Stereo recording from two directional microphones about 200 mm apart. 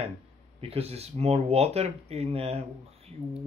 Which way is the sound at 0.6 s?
30° right (ahead or behind).